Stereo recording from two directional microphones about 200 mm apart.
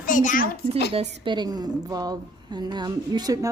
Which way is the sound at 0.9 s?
25° right (ahead or behind).